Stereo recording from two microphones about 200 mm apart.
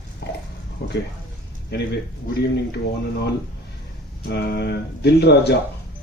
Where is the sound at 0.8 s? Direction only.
50° left (ahead or behind).